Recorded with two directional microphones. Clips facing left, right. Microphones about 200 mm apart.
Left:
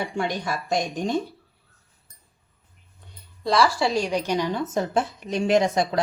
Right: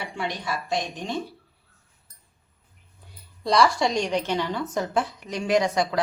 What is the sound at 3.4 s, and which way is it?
A woman's voice, centre (ahead or behind).